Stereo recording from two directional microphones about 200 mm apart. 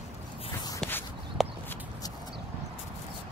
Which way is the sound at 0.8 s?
5° left (ahead or behind).